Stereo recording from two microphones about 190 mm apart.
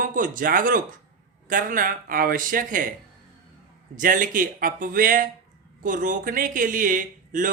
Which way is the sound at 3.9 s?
45° right (ahead or behind).